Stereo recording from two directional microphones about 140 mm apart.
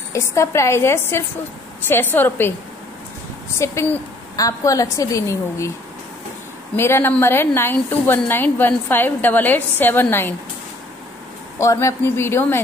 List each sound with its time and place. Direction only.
0.1 s a woman's voice: 20° left (ahead or behind)
3.5 s a woman's voice: 20° left (ahead or behind)
6.8 s a woman's voice: 15° left (ahead or behind)
11.5 s a woman's voice: 20° left (ahead or behind)